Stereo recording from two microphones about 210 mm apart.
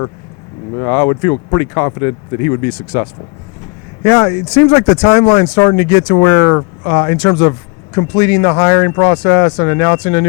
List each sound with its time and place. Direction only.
0.8 s speech: 20° left (ahead or behind)
4.0 s speech: 15° left (ahead or behind)